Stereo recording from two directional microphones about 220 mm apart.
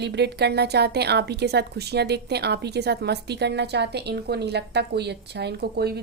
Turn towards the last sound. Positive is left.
turn(degrees=-45)  # may be behind; listen again after turning